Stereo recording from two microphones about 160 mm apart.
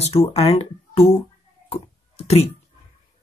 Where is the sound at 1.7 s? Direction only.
40° left (ahead or behind).